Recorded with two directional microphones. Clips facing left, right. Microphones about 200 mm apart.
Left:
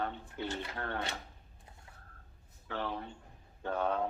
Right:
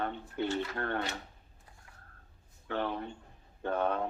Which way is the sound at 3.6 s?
60° right (ahead or behind).